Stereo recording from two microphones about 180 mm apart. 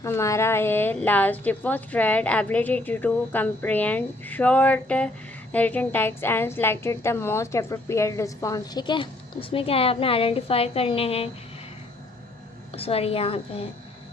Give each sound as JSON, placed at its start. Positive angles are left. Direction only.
{"t": 0.0, "sound": "a woman's voice", "side_deg": 15}
{"t": 12.7, "sound": "a woman's voice", "side_deg": 30}